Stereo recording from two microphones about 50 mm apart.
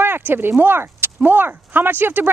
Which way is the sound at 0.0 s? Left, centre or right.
Right.